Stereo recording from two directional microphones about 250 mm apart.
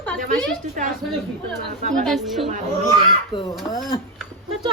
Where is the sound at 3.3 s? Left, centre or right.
Centre.